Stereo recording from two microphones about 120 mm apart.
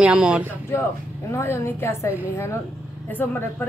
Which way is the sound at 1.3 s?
20° left (ahead or behind).